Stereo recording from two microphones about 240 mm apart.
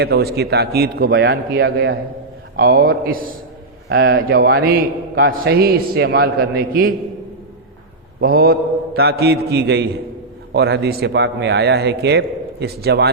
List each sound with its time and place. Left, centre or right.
0.0 s a man's voice: right
8.2 s a man's voice: right